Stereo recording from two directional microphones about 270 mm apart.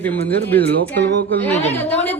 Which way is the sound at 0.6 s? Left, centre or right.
Right.